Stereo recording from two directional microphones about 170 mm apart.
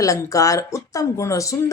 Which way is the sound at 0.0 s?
20° left (ahead or behind).